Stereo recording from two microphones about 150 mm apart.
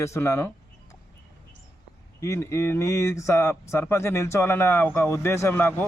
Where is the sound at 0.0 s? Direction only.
20° left (ahead or behind).